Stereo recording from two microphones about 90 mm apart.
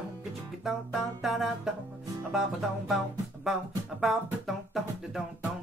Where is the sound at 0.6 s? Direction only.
Centre (ahead or behind).